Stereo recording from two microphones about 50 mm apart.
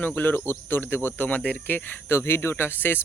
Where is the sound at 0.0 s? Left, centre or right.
Left.